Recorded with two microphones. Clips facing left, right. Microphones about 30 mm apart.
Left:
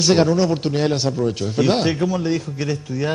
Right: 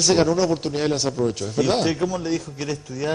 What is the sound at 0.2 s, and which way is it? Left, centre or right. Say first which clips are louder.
A man's voice: left 2 dB; centre.